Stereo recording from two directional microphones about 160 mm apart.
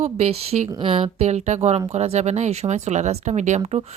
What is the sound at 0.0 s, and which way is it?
Speech, 40° right (ahead or behind).